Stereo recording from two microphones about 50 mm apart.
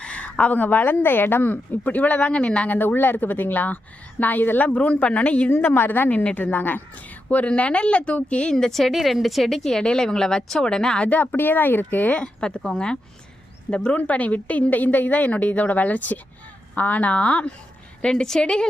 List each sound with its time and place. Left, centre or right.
0.0 s a woman's voice: left
1.8 s a woman's voice: left
2.7 s a woman's voice: left
5.5 s a woman's voice: left
8.5 s a woman's voice: centre
11.1 s speech: left
12.1 s a woman's voice: left
18.0 s speech: centre